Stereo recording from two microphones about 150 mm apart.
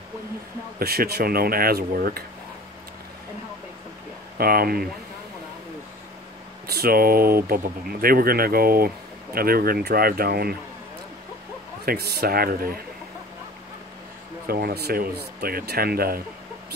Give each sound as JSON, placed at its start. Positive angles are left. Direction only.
{"t": 0.7, "sound": "speech", "side_deg": -90}
{"t": 4.4, "sound": "speech", "side_deg": -85}
{"t": 6.7, "sound": "speech", "side_deg": -85}
{"t": 11.8, "sound": "speech", "side_deg": -90}
{"t": 14.5, "sound": "speech", "side_deg": -90}